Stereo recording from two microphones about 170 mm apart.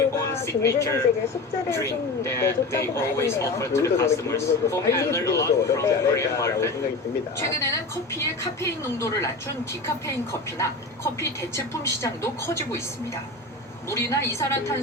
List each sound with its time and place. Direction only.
0.4 s speech: 15° left (ahead or behind)
10.6 s speech: 15° left (ahead or behind)
13.9 s speech: 15° left (ahead or behind)